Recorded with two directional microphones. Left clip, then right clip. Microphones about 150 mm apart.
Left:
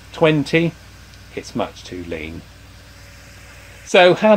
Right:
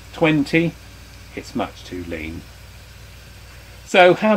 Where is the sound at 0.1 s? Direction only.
35° left (ahead or behind).